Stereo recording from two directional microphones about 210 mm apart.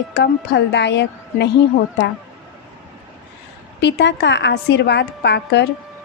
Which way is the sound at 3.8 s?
55° left (ahead or behind).